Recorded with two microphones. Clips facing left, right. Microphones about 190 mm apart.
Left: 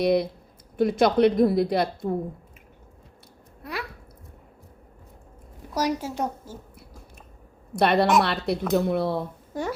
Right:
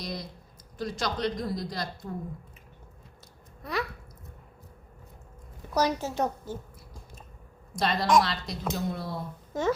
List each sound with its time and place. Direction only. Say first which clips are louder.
0.0 s a woman's voice: left 16 dB; 60° left (ahead or behind)
3.6 s a sound: right 2 dB; 10° left (ahead or behind)
5.7 s a woman's voice: left 1 dB; 10° left (ahead or behind)
7.7 s a woman's voice: left 5 dB; 65° left (ahead or behind)